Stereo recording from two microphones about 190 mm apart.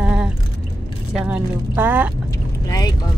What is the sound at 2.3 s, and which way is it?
Vehicle, 20° left (ahead or behind).